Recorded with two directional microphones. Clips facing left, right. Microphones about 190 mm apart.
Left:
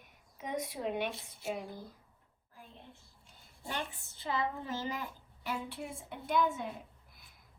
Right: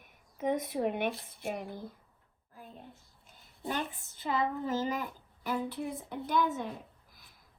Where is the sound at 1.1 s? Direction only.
Centre (ahead or behind).